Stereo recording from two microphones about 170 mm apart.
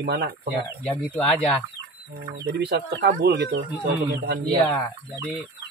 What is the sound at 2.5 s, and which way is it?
Speech, 75° right (ahead or behind).